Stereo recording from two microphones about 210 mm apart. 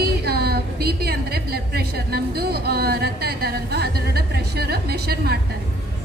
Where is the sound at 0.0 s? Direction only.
50° right (ahead or behind).